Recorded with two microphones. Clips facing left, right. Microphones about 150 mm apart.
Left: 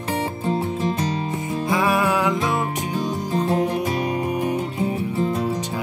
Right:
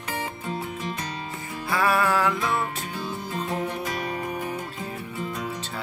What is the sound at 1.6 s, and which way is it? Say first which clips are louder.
Music: left 2 dB; 15° left (ahead or behind).